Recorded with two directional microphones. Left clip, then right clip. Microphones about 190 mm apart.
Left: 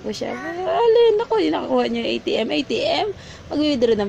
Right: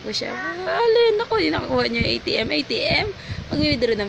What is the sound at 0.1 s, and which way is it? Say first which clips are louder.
Speech: right 1 dB; 20° left (ahead or behind).